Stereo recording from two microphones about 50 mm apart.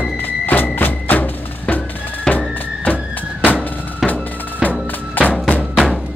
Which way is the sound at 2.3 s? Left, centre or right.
Centre.